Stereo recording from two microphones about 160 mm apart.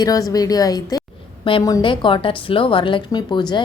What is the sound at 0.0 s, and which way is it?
A woman's voice, 25° left (ahead or behind).